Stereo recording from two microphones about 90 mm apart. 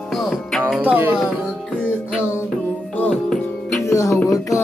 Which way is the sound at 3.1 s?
5° left (ahead or behind).